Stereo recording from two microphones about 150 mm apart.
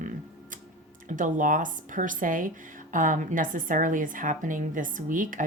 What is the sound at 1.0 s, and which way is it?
Speech, 60° right (ahead or behind).